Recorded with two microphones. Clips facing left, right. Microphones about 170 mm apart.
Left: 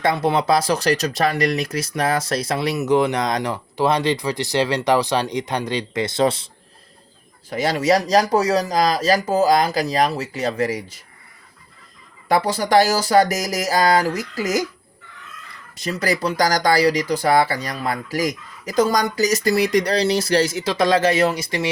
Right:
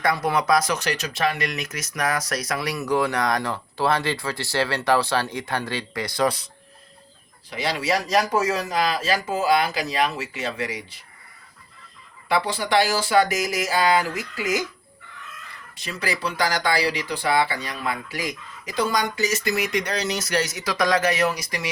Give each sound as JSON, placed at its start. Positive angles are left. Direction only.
{"t": 0.0, "sound": "speech", "side_deg": 25}
{"t": 7.5, "sound": "speech", "side_deg": 45}
{"t": 12.3, "sound": "speech", "side_deg": 40}
{"t": 15.7, "sound": "speech", "side_deg": 40}